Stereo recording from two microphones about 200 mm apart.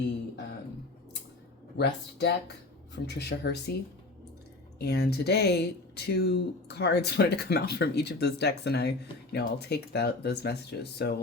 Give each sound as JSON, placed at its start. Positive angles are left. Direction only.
{"t": 1.7, "sound": "speech", "side_deg": 55}
{"t": 4.8, "sound": "speech", "side_deg": 55}